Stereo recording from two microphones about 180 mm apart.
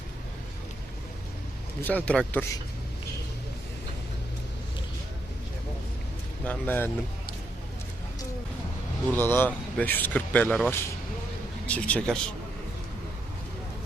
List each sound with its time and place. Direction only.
1.8 s speech: 10° left (ahead or behind)
6.4 s speech: 10° left (ahead or behind)
9.1 s speech: 10° left (ahead or behind)